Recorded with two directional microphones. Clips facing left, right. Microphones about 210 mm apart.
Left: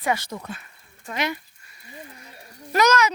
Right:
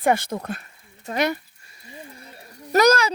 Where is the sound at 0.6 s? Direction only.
40° right (ahead or behind).